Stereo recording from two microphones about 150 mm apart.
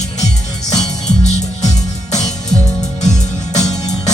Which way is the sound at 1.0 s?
50° left (ahead or behind).